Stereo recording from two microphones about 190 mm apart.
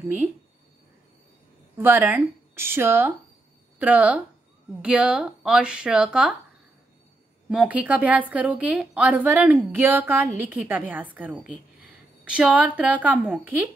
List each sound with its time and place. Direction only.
1.8 s a woman's voice: 10° right (ahead or behind)
7.4 s a woman's voice: 5° right (ahead or behind)
12.3 s a woman's voice: 5° right (ahead or behind)